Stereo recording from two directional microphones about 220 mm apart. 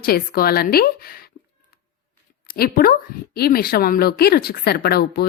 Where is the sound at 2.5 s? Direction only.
40° left (ahead or behind).